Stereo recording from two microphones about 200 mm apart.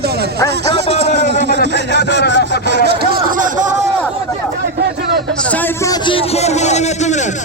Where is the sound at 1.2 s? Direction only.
60° right (ahead or behind).